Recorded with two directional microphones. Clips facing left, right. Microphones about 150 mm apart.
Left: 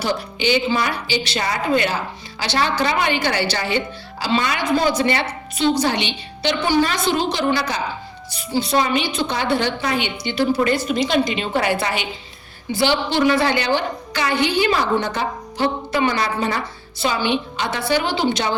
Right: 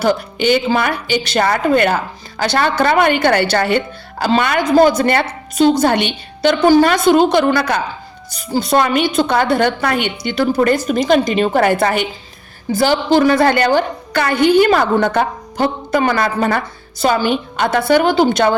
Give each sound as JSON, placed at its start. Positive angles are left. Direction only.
{"t": 0.0, "sound": "a woman's voice", "side_deg": -50}
{"t": 8.3, "sound": "a woman's voice", "side_deg": -45}